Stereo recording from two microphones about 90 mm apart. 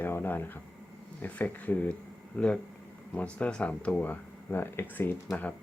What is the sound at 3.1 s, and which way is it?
Speech, 15° left (ahead or behind).